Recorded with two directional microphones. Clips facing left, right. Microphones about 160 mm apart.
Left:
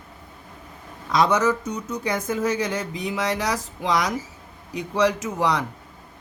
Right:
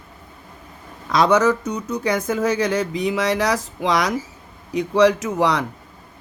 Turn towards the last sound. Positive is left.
turn(degrees=-75)  # may be behind; listen again after turning